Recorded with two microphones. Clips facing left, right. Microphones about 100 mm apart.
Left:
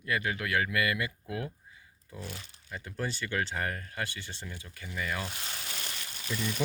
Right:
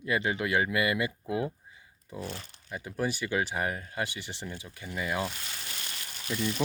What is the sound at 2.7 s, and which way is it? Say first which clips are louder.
Speech: right 4 dB; 10° right (ahead or behind).